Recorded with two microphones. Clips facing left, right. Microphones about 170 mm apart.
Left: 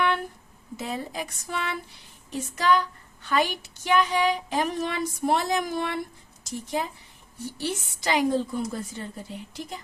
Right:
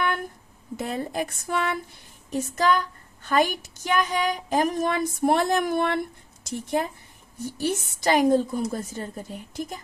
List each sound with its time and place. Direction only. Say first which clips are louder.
0.8 s speech: right 4 dB; 55° right (ahead or behind)